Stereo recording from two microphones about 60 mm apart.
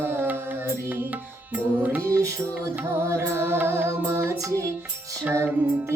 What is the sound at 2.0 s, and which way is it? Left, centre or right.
Music, right.